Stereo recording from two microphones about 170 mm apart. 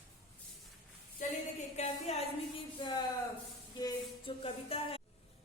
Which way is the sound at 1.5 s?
40° left (ahead or behind).